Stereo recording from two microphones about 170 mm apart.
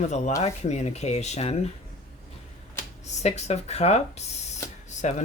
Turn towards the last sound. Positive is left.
turn(degrees=40)  # may be behind; listen again after turning